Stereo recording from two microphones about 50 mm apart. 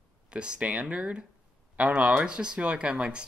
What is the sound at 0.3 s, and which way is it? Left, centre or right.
Speech, centre.